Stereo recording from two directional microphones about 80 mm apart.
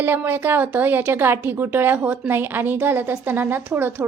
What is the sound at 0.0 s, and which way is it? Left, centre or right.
A woman's voice, right.